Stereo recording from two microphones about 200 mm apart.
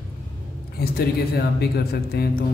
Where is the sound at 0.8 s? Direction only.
50° left (ahead or behind).